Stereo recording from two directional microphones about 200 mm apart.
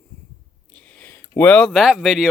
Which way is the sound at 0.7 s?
5° left (ahead or behind).